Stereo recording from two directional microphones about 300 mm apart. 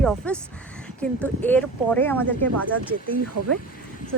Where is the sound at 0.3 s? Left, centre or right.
Centre.